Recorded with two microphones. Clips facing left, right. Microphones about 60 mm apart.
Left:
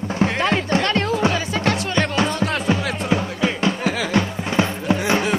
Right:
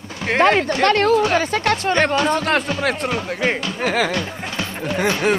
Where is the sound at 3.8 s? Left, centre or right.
Right.